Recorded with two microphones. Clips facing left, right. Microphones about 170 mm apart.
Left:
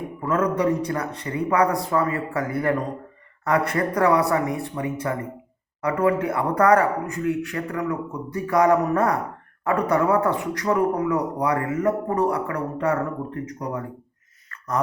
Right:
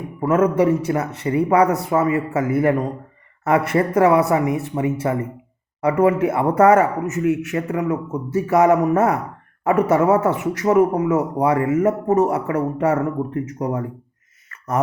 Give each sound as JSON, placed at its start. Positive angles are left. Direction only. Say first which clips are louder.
{"t": 0.2, "sound": "speech", "louder": "right 6 dB", "side_deg": -25}